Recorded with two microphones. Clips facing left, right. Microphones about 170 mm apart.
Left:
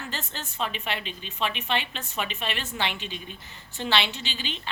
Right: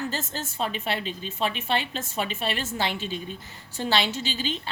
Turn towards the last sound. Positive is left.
turn(degrees=-40)  # may be behind; listen again after turning